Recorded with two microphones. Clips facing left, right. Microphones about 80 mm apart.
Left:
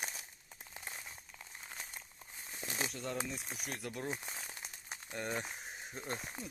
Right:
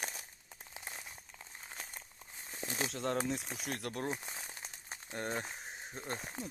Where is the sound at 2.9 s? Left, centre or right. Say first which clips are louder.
Right 5 dB; right.